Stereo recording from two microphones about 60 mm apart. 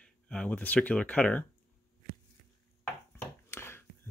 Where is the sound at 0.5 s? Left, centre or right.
Left.